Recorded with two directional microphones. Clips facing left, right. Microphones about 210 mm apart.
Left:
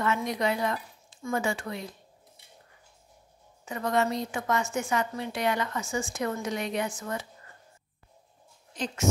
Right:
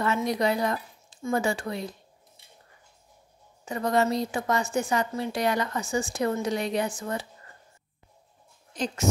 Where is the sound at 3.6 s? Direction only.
35° right (ahead or behind).